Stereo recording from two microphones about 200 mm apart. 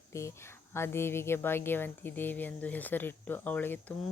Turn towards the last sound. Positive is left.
turn(degrees=10)  # may be behind; listen again after turning